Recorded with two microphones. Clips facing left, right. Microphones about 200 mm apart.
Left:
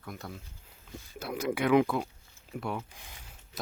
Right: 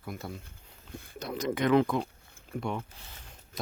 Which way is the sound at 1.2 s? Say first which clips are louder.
Even; 5° left (ahead or behind).